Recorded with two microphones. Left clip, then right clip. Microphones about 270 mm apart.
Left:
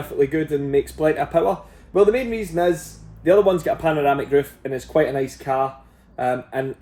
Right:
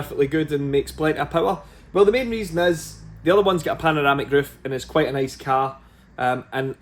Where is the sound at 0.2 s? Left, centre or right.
Centre.